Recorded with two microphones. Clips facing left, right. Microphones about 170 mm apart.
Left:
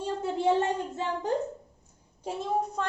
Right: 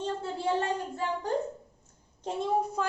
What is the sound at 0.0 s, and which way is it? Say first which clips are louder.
Speech: left 4 dB; 20° left (ahead or behind).